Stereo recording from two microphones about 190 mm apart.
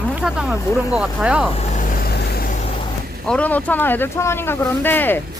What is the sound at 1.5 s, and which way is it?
Vehicle, 35° left (ahead or behind).